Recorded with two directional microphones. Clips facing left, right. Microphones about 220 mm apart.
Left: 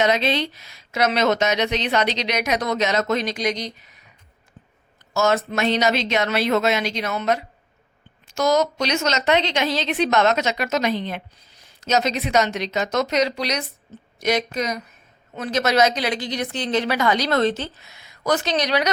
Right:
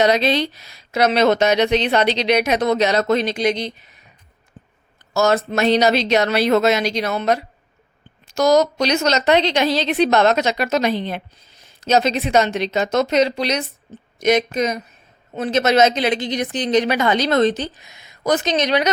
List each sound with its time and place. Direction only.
0.0 s a woman's voice: 35° right (ahead or behind)
5.1 s a woman's voice: 35° right (ahead or behind)